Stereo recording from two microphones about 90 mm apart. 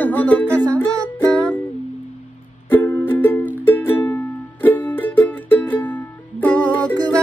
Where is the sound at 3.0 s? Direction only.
20° left (ahead or behind).